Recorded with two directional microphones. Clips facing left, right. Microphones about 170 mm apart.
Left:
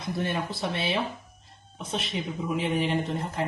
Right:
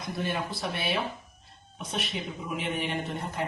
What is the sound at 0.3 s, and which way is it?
Speech, 20° left (ahead or behind).